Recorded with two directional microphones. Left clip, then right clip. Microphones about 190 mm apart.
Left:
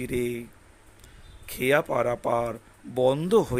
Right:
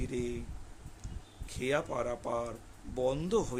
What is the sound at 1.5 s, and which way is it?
Speech, 30° left (ahead or behind).